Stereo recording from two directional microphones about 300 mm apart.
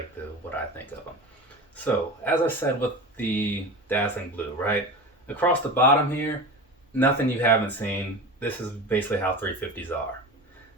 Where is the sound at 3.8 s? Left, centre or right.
Centre.